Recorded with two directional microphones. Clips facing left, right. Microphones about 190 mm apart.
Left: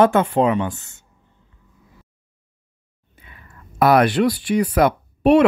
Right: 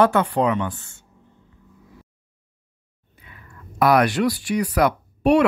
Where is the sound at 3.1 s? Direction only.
25° left (ahead or behind).